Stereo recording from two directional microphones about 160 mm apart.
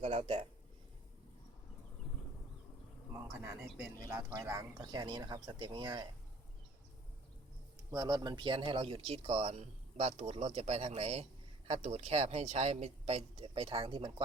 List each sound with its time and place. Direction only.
0.0 s speech: 40° right (ahead or behind)
4.1 s speech: 20° right (ahead or behind)
7.9 s speech: 20° right (ahead or behind)